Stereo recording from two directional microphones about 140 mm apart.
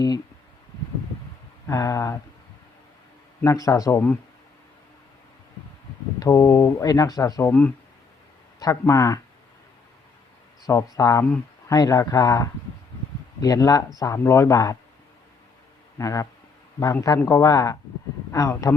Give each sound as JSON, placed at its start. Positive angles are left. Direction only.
{"t": 1.6, "sound": "speech", "side_deg": 25}
{"t": 3.4, "sound": "speech", "side_deg": 25}
{"t": 6.1, "sound": "speech", "side_deg": 25}
{"t": 8.5, "sound": "a sound", "side_deg": 25}
{"t": 8.8, "sound": "speech", "side_deg": 25}
{"t": 10.6, "sound": "speech", "side_deg": 20}
{"t": 16.0, "sound": "speech", "side_deg": 25}